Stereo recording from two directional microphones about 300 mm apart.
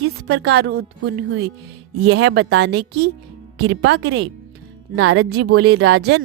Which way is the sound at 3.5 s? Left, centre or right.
Right.